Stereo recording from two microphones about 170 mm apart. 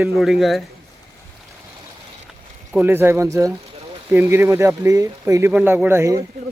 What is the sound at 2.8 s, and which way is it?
A man's voice, 15° right (ahead or behind).